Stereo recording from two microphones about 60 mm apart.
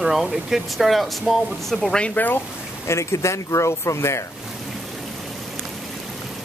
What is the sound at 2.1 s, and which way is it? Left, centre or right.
Speech, left.